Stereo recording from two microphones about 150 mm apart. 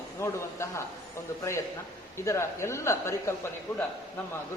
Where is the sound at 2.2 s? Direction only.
20° left (ahead or behind).